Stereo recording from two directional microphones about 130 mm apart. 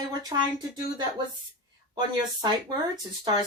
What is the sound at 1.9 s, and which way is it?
Speech, 35° right (ahead or behind).